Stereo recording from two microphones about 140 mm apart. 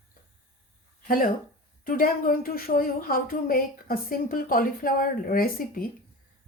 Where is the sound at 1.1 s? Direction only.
90° left.